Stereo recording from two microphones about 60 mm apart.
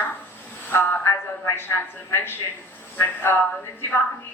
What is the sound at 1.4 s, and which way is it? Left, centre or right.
A man's voice, left.